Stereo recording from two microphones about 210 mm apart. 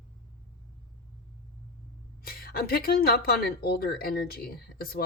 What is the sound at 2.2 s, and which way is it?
Speech, 45° left (ahead or behind).